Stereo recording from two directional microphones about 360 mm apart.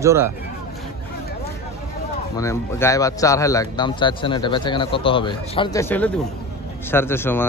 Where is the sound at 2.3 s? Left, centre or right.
Centre.